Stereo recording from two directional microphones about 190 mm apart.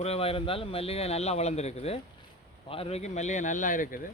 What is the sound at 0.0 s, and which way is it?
A man's voice, 30° left (ahead or behind).